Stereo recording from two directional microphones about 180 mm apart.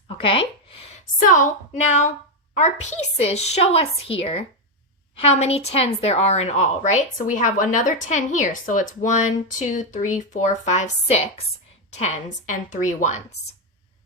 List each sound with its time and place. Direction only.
0.2 s speech: 30° left (ahead or behind)
1.2 s a woman's voice: 45° left (ahead or behind)
2.6 s a woman's voice: 40° left (ahead or behind)